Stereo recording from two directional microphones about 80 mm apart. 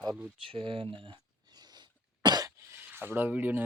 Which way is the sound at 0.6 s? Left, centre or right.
Right.